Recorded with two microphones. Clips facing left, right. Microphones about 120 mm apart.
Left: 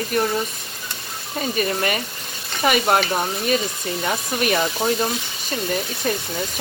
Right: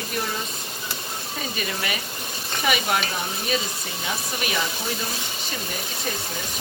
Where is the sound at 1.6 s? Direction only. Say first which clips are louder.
Left 8 dB; 45° left (ahead or behind).